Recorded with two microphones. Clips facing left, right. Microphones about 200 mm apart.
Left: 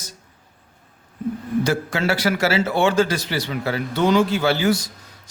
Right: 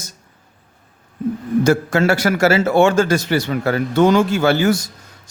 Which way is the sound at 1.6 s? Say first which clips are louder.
Right 7 dB; 45° right (ahead or behind).